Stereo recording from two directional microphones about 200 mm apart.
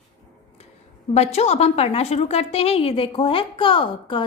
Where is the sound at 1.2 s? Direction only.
30° left (ahead or behind).